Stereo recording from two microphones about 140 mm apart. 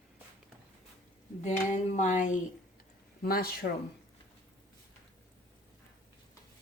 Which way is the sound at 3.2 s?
90° left.